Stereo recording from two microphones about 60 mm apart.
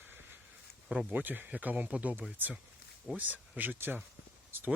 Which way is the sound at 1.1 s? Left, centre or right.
Right.